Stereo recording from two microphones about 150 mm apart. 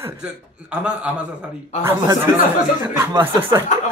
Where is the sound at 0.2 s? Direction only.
5° right (ahead or behind).